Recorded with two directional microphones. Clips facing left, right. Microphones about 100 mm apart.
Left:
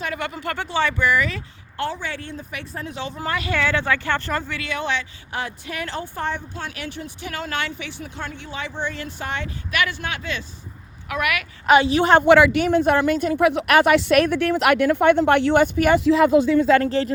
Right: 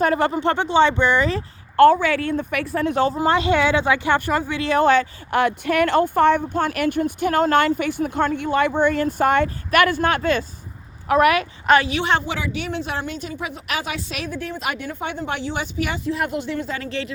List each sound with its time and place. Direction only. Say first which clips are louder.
0.0 s speech: right 9 dB; 35° right (ahead or behind)
1.7 s a woman's voice: right 15 dB; 55° right (ahead or behind)
2.0 s speech: right 10 dB; 80° right; by 3.0 s 65° right (ahead or behind)
3.2 s speech: right 6 dB; 25° right (ahead or behind)
4.6 s speech: right 10 dB; 40° right (ahead or behind)
5.3 s speech: right 10 dB; 60° right (ahead or behind)
11.1 s a woman's voice: right 9 dB; 35° right (ahead or behind)
11.9 s speech: left 5 dB; 40° left (ahead or behind)
12.2 s a woman's voice: left 13 dB; 65° left (ahead or behind)
12.6 s a woman's voice: left 9 dB; 50° left (ahead or behind)
16.0 s speech: left 8 dB; 90° left
16.8 s speech: left 7 dB; 40° left (ahead or behind)